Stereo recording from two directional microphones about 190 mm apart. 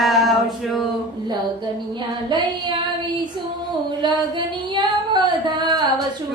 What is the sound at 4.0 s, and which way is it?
Music, 25° right (ahead or behind).